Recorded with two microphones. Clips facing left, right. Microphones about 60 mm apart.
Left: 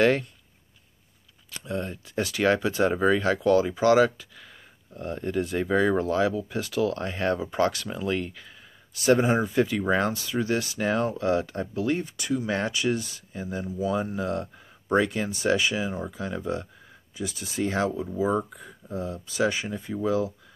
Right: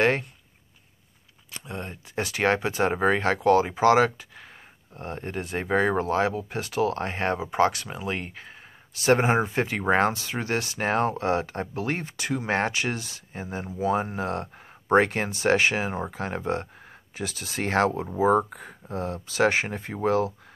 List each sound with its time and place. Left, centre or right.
0.0 s speech: right
1.5 s speech: right
7.3 s speech: right
17.1 s speech: right
18.1 s speech: right